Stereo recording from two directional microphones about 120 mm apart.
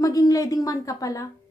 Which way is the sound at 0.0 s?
30° left (ahead or behind).